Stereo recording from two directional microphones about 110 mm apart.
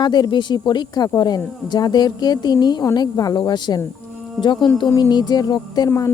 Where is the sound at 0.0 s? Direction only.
40° left (ahead or behind).